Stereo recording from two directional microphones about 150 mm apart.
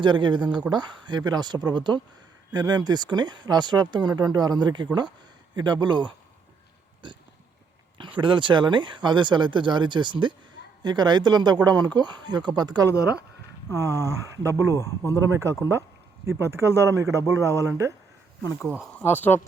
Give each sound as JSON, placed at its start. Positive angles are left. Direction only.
{"t": 0.0, "sound": "speech", "side_deg": -30}
{"t": 8.2, "sound": "speech", "side_deg": -30}
{"t": 19.1, "sound": "speech", "side_deg": 15}